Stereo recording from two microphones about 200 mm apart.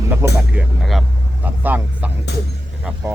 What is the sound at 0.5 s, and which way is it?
Speech, centre (ahead or behind).